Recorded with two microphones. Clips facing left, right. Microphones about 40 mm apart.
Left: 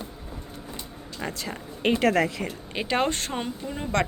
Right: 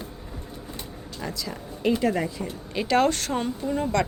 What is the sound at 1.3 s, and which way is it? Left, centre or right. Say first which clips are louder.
Speech: even; left.